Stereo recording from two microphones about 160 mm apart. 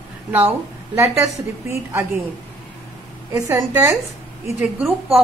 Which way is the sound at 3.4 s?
20° right (ahead or behind).